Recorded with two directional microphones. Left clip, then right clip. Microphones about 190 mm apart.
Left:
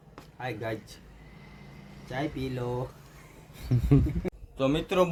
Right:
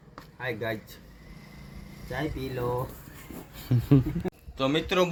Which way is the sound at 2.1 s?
Centre (ahead or behind).